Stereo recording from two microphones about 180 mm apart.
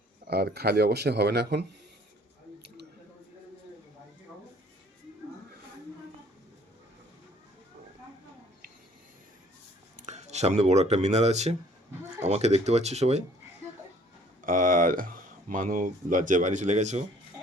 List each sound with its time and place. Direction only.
0.3 s speech: 65° right (ahead or behind)
10.1 s speech: 40° right (ahead or behind)
14.4 s speech: 45° right (ahead or behind)